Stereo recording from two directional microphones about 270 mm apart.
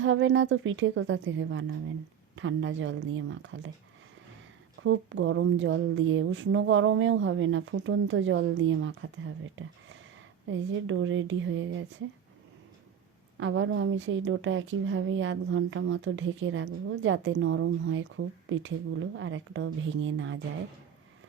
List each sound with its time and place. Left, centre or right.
0.0 s speech: right
4.8 s speech: right
13.4 s speech: right